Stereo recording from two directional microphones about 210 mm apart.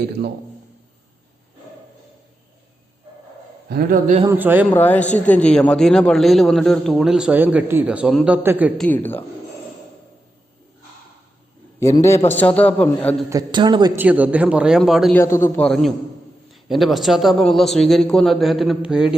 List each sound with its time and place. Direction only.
3.7 s a man's voice: 45° right (ahead or behind)
4.3 s a man's voice: 10° right (ahead or behind)
4.7 s a man's voice: 10° left (ahead or behind); by 8.7 s 5° right (ahead or behind)
8.8 s a man's voice: 10° left (ahead or behind)
11.8 s a man's voice: 15° left (ahead or behind)
13.3 s a man's voice: 20° right (ahead or behind)
14.0 s a man's voice: 5° right (ahead or behind)
15.2 s a man's voice: 15° left (ahead or behind); by 19.1 s 5° right (ahead or behind)